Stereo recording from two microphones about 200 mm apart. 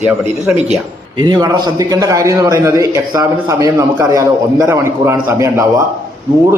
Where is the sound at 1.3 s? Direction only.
20° right (ahead or behind).